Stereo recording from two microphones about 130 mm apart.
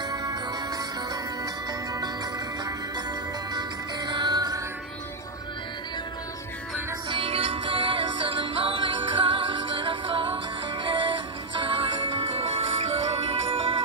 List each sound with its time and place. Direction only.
0.1 s music: 25° right (ahead or behind)
3.5 s music: 35° right (ahead or behind)
7.1 s music: 45° right (ahead or behind)